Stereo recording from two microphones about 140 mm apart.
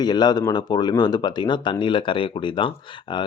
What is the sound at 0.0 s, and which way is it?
Speech, 30° left (ahead or behind).